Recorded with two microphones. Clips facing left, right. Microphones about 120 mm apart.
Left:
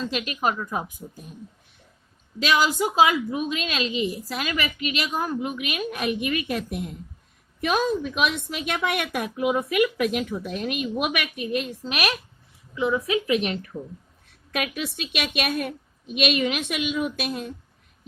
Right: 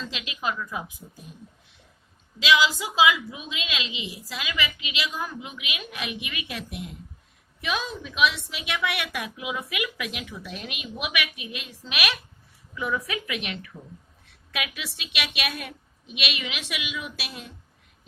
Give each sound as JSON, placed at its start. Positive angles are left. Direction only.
{"t": 0.0, "sound": "a woman's voice", "side_deg": 45}
{"t": 2.4, "sound": "a woman's voice", "side_deg": 50}
{"t": 12.7, "sound": "a woman's voice", "side_deg": 25}